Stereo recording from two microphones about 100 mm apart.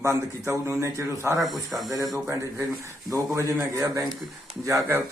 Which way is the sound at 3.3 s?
30° right (ahead or behind).